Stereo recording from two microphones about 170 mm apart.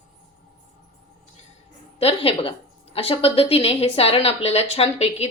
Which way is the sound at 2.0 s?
35° left (ahead or behind).